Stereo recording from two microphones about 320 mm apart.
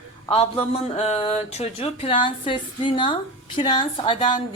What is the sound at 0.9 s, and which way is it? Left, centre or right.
Speech, centre.